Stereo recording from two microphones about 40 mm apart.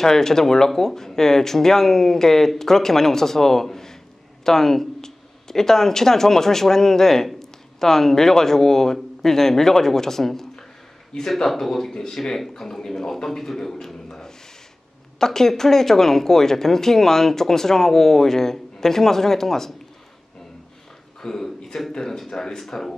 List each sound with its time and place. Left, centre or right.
0.0 s speech: centre
21.2 s speech: centre